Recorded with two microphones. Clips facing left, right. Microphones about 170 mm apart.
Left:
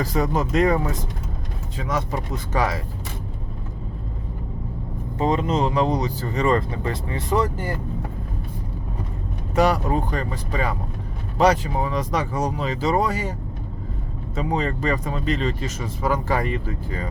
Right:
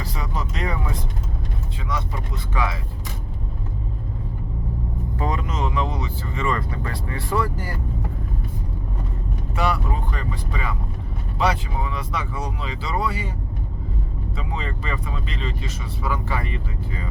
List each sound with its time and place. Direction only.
0.0 s speech: 45° left (ahead or behind)
5.1 s speech: 25° left (ahead or behind)
9.6 s speech: 40° left (ahead or behind)
14.3 s speech: 45° left (ahead or behind)